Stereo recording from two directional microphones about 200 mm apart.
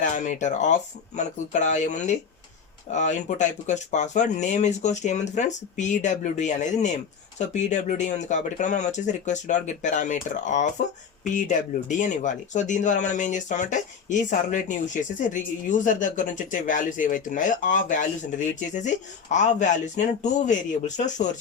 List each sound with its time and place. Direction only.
0.0 s speech: 40° left (ahead or behind)